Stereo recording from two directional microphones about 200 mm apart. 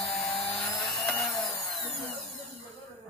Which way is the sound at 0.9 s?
Centre (ahead or behind).